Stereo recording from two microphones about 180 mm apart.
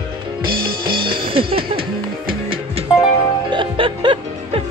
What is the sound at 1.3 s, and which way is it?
Music, 30° right (ahead or behind).